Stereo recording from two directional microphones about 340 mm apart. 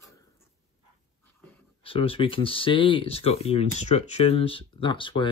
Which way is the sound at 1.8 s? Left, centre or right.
Centre.